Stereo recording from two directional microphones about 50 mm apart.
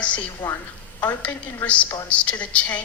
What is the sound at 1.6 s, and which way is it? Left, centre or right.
A woman's voice, left.